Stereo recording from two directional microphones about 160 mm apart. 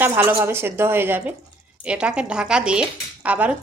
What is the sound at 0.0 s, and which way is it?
A woman's voice, 10° right (ahead or behind).